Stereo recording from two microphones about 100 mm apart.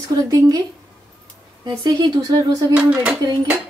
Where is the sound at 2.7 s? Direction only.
10° right (ahead or behind).